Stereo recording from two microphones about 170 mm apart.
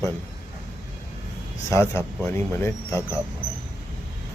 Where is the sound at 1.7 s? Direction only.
15° left (ahead or behind).